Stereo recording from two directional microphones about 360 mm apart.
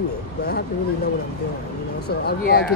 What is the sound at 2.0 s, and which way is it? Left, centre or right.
Speech, left.